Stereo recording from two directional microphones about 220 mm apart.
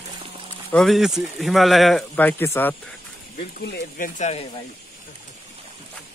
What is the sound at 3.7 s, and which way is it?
Speech, 35° left (ahead or behind).